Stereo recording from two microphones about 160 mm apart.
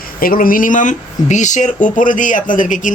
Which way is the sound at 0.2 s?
65° left (ahead or behind).